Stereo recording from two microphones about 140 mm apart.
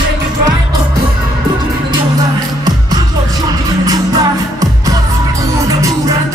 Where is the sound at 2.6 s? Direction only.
30° right (ahead or behind).